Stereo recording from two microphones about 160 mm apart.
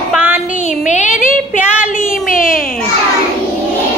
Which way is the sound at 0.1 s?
10° right (ahead or behind).